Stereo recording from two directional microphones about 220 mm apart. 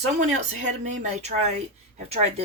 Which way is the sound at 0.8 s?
30° right (ahead or behind).